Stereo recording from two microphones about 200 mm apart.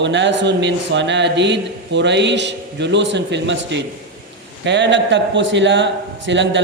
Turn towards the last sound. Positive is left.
turn(degrees=-65)  # may be behind; listen again after turning